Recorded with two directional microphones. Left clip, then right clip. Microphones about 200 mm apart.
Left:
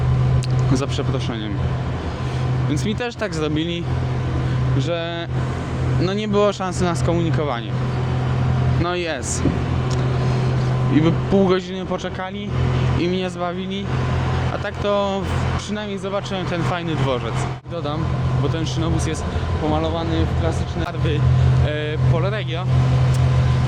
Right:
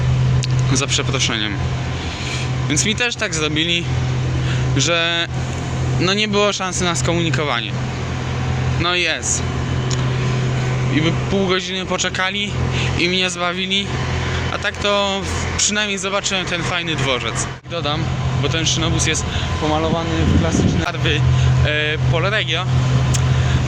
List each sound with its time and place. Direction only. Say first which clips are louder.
0.7 s speech: right 5 dB; 20° left (ahead or behind)
2.6 s speech: right 7 dB; 10° left (ahead or behind)
4.8 s speech: right 8 dB; centre (ahead or behind)
8.8 s speech: right 6 dB; 20° left (ahead or behind)
10.9 s speech: left 2 dB; 25° left (ahead or behind)
11.9 s speech: right 6 dB; 10° left (ahead or behind)
16.5 s speech: right 3 dB; 25° left (ahead or behind)
18.4 s speech: right 7 dB; 15° left (ahead or behind)
21.7 s speech: right 8 dB; 15° left (ahead or behind)